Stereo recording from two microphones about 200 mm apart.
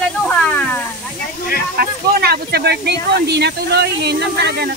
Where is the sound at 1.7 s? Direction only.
50° right (ahead or behind).